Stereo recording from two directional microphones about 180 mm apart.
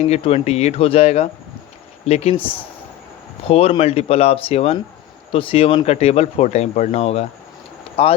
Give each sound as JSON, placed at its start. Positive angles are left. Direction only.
{"t": 0.1, "sound": "speech", "side_deg": 35}
{"t": 3.5, "sound": "speech", "side_deg": 35}